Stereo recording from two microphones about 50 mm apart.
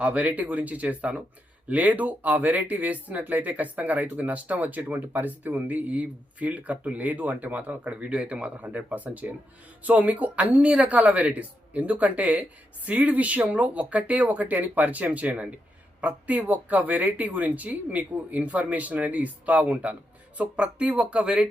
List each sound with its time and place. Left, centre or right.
0.0 s speech: right